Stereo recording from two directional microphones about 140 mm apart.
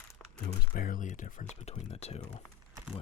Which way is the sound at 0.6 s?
85° left.